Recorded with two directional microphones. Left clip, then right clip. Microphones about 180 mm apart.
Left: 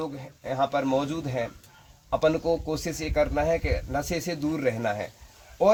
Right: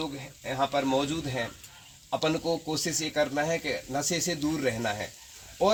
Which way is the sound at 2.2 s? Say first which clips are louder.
Left 5 dB; 30° left (ahead or behind).